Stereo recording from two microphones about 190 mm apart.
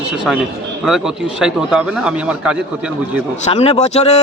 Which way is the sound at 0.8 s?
Centre (ahead or behind).